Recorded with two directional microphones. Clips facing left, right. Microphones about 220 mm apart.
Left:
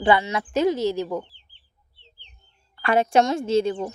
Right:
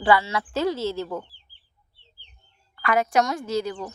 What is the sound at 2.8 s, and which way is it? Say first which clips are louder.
Speech: left 3 dB; 30° left (ahead or behind).